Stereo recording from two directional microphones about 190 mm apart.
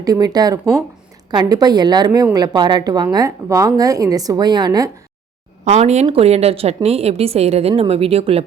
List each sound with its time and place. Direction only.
0.0 s a woman's voice: 20° right (ahead or behind)
5.6 s a woman's voice: 35° right (ahead or behind)